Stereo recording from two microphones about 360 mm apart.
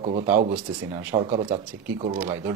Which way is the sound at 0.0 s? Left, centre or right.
Centre.